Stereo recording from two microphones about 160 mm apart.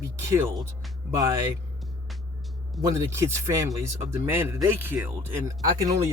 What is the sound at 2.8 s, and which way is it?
Speech, 20° right (ahead or behind).